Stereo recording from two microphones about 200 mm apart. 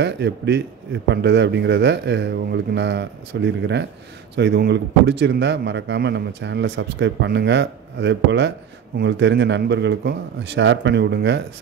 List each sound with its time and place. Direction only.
0.0 s speech: 60° right (ahead or behind)